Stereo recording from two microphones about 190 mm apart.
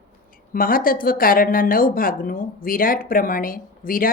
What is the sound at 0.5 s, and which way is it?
A woman's voice, 50° left (ahead or behind).